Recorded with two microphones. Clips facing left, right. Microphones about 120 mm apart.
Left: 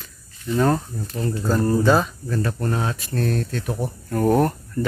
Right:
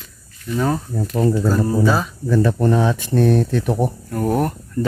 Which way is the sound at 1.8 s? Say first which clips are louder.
Left 1 dB; centre (ahead or behind).